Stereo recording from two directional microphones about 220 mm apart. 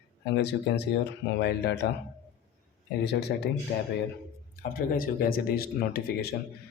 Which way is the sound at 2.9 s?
50° left (ahead or behind).